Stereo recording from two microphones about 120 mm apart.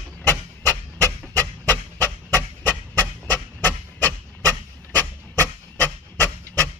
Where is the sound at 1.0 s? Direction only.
25° right (ahead or behind).